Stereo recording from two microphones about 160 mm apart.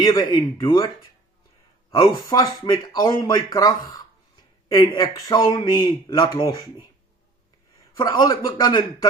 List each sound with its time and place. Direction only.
0.0 s speech: 25° left (ahead or behind)
1.9 s speech: 30° left (ahead or behind)
7.9 s speech: 25° left (ahead or behind)